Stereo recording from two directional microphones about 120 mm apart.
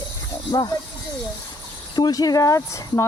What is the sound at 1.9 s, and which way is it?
Speech, 30° left (ahead or behind).